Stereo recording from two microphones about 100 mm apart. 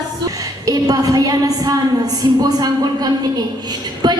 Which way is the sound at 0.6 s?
40° right (ahead or behind).